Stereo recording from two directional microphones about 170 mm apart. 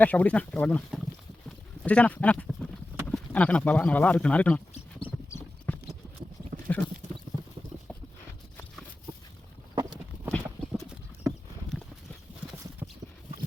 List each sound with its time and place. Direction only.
0.0 s speech: 10° left (ahead or behind)
4.7 s a sound: 30° left (ahead or behind)
5.7 s clip-clop: 10° left (ahead or behind)
10.3 s clip-clop: 5° left (ahead or behind)